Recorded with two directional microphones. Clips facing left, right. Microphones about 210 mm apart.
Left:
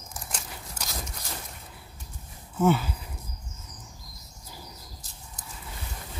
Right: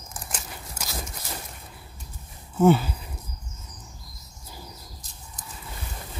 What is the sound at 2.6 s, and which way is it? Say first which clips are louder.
Speech: right 5 dB; 30° right (ahead or behind).